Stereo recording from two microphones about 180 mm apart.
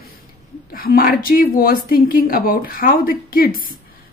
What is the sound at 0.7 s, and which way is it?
Speech, 55° left (ahead or behind).